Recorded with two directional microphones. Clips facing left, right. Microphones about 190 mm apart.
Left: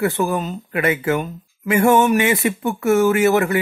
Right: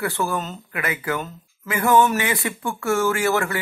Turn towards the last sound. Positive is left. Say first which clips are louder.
# left 6 dB
turn(degrees=20)  # may be behind; listen again after turning